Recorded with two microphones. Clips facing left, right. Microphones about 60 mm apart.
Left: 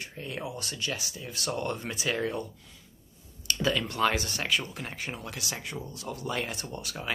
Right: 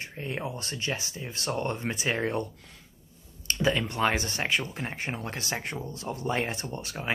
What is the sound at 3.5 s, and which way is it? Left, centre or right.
Speech, right.